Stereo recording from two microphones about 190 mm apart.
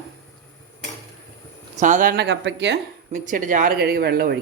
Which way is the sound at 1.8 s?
40° right (ahead or behind).